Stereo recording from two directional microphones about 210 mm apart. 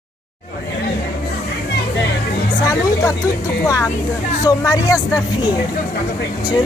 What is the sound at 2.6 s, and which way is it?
Speech, 15° left (ahead or behind).